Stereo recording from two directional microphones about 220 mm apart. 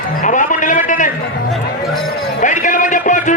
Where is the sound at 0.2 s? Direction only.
35° left (ahead or behind).